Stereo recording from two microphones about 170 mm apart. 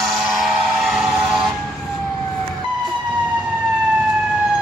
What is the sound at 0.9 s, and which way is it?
Vehicle, centre (ahead or behind).